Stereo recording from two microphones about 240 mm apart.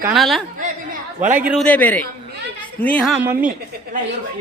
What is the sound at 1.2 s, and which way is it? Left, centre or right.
Speech, right.